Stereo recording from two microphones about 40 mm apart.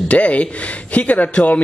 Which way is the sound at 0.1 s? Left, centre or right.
Left.